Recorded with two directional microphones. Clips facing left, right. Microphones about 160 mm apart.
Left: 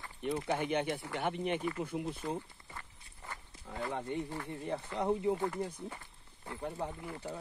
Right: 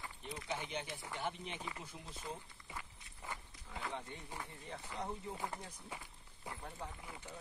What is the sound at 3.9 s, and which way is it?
Speech, 60° left (ahead or behind).